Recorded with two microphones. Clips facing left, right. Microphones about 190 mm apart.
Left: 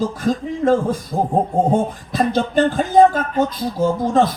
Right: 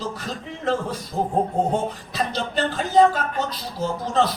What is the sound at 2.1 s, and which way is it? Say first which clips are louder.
Speech: left 8 dB; 50° left (ahead or behind).